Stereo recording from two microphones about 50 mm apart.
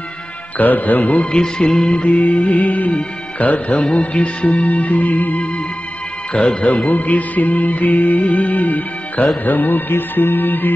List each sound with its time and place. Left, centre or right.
0.6 s music: left
1.2 s speech: left
1.9 s music: left
6.3 s speech: left
6.9 s music: left